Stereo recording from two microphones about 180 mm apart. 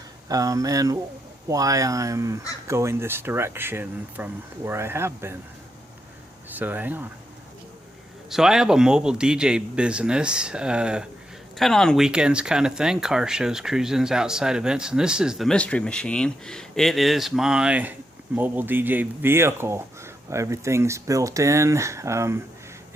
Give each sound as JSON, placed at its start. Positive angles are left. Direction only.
{"t": 0.3, "sound": "speech", "side_deg": -20}
{"t": 6.5, "sound": "speech", "side_deg": -10}
{"t": 8.3, "sound": "speech", "side_deg": -5}